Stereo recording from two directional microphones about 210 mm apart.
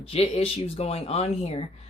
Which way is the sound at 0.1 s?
30° left (ahead or behind).